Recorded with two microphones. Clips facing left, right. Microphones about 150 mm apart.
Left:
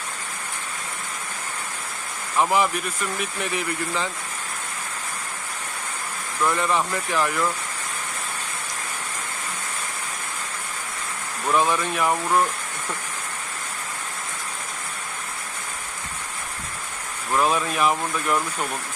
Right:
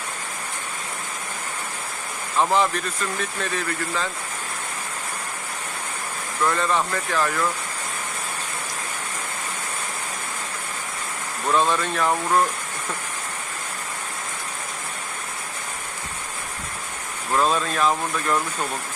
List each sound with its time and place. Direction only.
2.5 s speech: 10° left (ahead or behind)
6.5 s speech: 15° left (ahead or behind)
11.5 s speech: 10° left (ahead or behind)
17.4 s speech: 15° left (ahead or behind)